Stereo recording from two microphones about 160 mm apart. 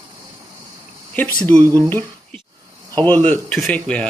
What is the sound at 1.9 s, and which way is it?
Speech, 10° left (ahead or behind).